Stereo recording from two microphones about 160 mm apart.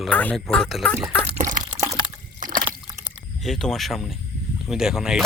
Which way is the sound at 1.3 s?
55° right (ahead or behind).